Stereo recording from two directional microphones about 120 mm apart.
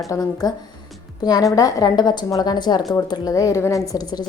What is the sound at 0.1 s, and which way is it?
A woman's voice, 30° left (ahead or behind).